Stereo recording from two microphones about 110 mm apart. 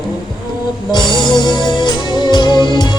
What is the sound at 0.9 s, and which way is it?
Music, 40° left (ahead or behind).